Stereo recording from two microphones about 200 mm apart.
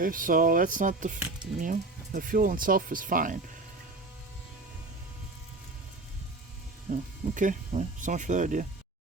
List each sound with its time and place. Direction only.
0.0 s speech: 45° right (ahead or behind)
6.9 s speech: 40° right (ahead or behind)